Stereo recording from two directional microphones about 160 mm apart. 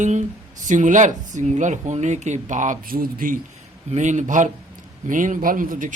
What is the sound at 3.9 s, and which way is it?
Speech, 50° right (ahead or behind).